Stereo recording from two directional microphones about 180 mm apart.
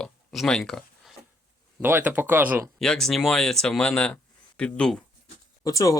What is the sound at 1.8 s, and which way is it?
Speech, 10° right (ahead or behind).